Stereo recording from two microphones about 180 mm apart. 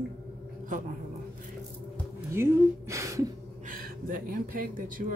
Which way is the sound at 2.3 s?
15° right (ahead or behind).